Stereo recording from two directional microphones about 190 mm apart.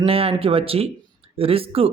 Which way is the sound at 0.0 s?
30° right (ahead or behind).